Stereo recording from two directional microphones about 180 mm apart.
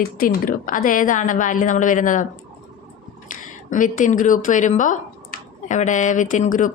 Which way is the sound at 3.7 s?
45° left (ahead or behind).